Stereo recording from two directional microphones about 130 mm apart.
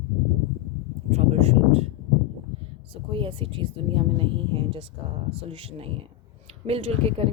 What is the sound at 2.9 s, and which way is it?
Speech, 45° right (ahead or behind).